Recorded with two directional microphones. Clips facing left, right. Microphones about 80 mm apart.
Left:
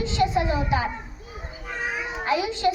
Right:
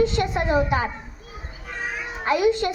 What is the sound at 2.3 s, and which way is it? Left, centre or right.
Speech, right.